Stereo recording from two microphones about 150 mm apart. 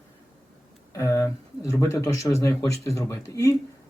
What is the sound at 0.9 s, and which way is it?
Speech, 20° left (ahead or behind).